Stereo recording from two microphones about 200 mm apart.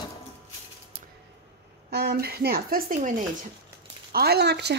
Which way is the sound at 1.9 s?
50° right (ahead or behind).